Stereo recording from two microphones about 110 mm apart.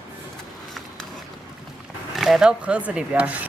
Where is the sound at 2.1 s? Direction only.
Centre (ahead or behind).